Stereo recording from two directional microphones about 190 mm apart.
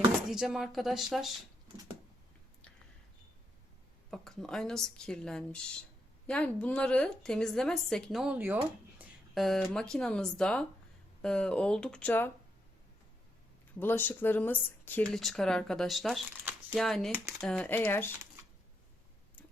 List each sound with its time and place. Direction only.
0.3 s speech: centre (ahead or behind)
1.7 s a sound: 20° right (ahead or behind)
4.1 s speech: centre (ahead or behind)
13.7 s speech: 10° left (ahead or behind)